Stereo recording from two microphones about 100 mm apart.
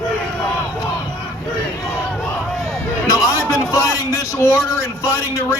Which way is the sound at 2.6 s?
30° left (ahead or behind).